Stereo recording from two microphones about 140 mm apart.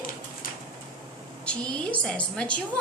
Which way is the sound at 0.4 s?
90° left.